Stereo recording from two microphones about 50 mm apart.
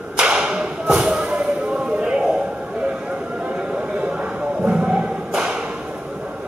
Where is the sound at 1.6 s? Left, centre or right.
Centre.